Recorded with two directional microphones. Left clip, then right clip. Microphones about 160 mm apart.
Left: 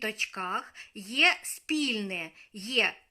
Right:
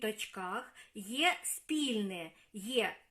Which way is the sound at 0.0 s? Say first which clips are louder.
Left 6 dB; 5° left (ahead or behind).